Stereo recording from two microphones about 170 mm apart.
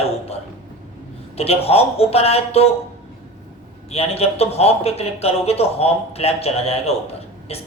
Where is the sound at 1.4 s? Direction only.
35° left (ahead or behind).